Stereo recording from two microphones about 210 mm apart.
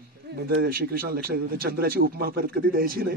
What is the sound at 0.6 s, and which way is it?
A man's voice, 45° right (ahead or behind).